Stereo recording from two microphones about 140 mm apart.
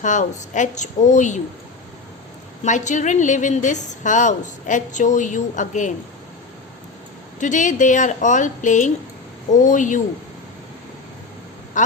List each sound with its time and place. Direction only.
0.0 s a woman's voice: 60° left (ahead or behind)
2.6 s a woman's voice: 60° left (ahead or behind)
7.3 s a woman's voice: 60° left (ahead or behind)